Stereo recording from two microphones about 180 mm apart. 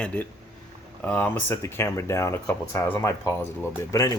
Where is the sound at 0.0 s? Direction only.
10° left (ahead or behind).